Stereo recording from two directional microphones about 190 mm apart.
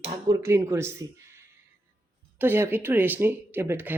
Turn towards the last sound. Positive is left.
turn(degrees=-10)  # may be behind; listen again after turning